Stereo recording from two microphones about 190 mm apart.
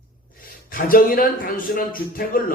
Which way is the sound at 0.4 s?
50° left (ahead or behind).